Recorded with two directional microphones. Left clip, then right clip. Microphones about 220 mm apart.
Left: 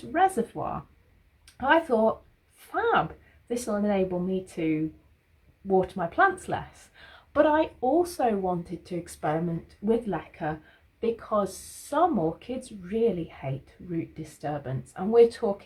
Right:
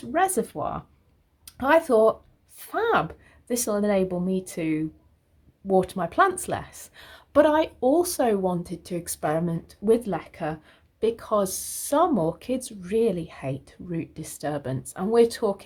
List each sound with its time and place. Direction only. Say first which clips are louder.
0.1 s a woman's voice: even; 45° right (ahead or behind)
5.8 s a woman's voice: even; 40° right (ahead or behind)